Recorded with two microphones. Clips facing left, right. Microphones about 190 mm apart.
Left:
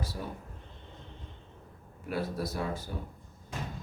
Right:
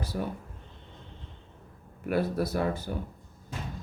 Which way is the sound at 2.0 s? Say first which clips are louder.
Right 6 dB; 65° right (ahead or behind).